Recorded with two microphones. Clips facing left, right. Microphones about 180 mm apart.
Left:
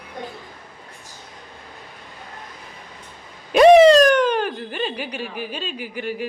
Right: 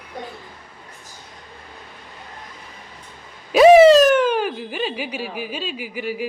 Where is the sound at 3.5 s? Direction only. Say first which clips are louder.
Right 1 dB; 5° right (ahead or behind).